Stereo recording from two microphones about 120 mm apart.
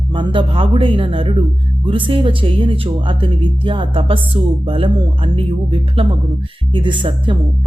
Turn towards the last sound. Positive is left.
turn(degrees=-45)  # may be behind; listen again after turning